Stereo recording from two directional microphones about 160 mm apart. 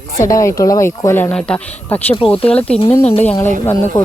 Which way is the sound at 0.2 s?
20° left (ahead or behind).